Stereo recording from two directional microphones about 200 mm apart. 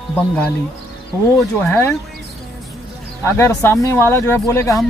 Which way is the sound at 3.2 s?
15° left (ahead or behind).